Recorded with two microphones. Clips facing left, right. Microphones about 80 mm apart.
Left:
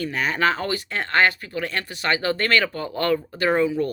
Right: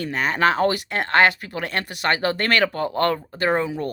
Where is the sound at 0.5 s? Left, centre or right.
Right.